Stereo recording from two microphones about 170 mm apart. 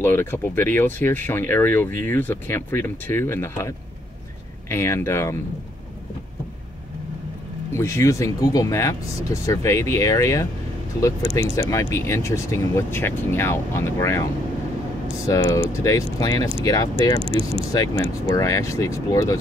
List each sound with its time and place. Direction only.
0.0 s speech: 15° left (ahead or behind)
7.7 s speech: 15° left (ahead or behind)
15.2 s speech: 20° left (ahead or behind)